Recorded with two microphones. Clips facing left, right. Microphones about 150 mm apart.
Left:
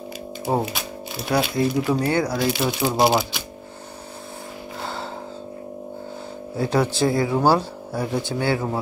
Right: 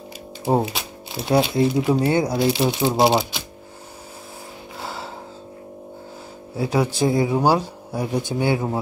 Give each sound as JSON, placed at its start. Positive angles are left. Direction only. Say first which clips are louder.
{"t": 1.1, "sound": "speech", "louder": "right 3 dB", "side_deg": -25}
{"t": 4.8, "sound": "music", "louder": "left 1 dB", "side_deg": -5}
{"t": 6.5, "sound": "speech", "louder": "even", "side_deg": -10}
{"t": 7.1, "sound": "speech", "louder": "right 1 dB", "side_deg": -20}